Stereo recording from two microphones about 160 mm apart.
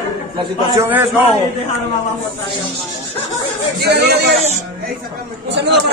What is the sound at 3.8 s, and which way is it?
Speech, 90° right.